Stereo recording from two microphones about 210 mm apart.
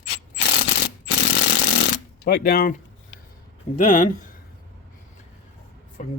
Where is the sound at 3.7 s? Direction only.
40° left (ahead or behind).